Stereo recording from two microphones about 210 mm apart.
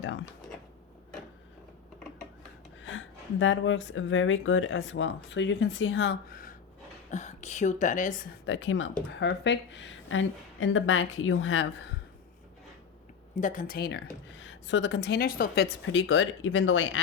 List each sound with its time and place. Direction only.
2.8 s speech: 65° left (ahead or behind)
7.1 s speech: 35° left (ahead or behind)
8.4 s speech: 65° left (ahead or behind)
13.3 s speech: 35° left (ahead or behind)
14.4 s speech: 60° left (ahead or behind)